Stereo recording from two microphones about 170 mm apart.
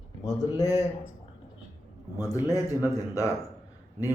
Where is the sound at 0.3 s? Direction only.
20° left (ahead or behind).